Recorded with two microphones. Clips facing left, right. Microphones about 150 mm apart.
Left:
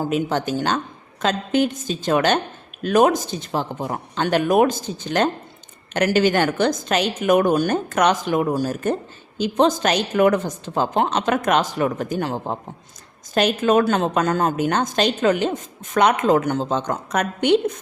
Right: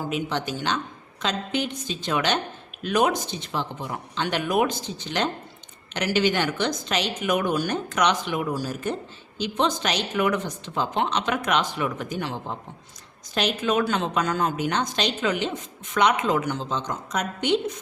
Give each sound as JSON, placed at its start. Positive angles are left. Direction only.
{"t": 0.0, "sound": "a woman's voice", "side_deg": 45}